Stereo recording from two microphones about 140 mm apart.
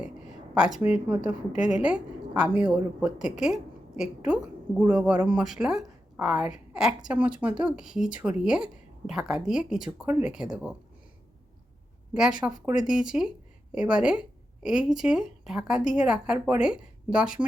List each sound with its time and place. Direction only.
0.0 s a woman's voice: 5° right (ahead or behind)
12.1 s a woman's voice: 5° right (ahead or behind)